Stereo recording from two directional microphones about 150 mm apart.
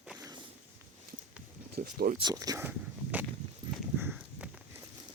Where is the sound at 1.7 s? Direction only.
85° right.